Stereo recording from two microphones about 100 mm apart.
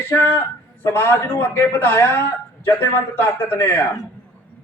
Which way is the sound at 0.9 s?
20° left (ahead or behind).